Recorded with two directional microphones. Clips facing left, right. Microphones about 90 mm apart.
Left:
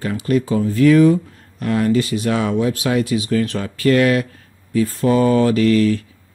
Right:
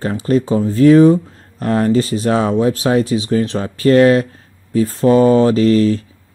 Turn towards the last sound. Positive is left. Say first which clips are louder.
# right 2 dB
turn(degrees=-30)  # may be behind; listen again after turning